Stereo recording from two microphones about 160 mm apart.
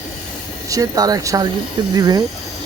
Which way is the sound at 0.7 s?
20° right (ahead or behind).